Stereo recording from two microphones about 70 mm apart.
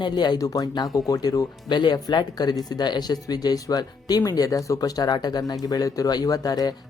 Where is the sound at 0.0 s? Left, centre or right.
Left.